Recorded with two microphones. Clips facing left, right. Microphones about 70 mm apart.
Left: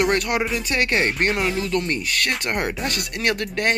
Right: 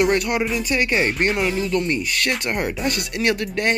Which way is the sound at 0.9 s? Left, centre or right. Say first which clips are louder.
Even; centre.